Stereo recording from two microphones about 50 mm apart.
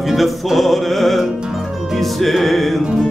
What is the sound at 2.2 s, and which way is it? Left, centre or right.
Music, centre.